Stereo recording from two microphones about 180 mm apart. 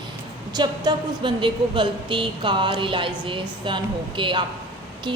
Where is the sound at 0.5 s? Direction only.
25° right (ahead or behind).